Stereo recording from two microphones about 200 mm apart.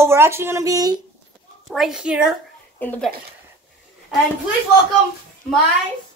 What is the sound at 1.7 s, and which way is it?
Speech, centre (ahead or behind).